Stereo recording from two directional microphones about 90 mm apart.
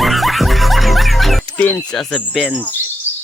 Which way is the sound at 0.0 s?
Centre (ahead or behind).